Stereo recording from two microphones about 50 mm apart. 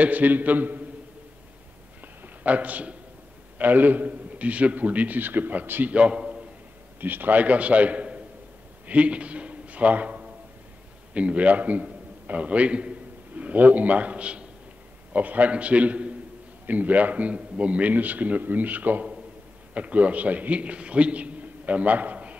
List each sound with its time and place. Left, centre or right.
0.0 s a man's voice: right
2.2 s a man's voice: right
5.9 s a man's voice: right
7.0 s a man's voice: right